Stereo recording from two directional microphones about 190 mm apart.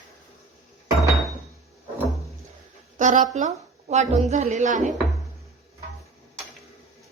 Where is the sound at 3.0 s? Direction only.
40° right (ahead or behind).